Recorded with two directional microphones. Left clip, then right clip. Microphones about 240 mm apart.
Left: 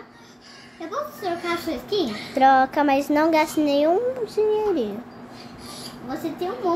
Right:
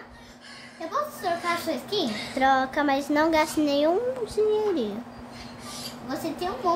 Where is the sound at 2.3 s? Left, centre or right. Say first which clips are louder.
Left 6 dB; centre.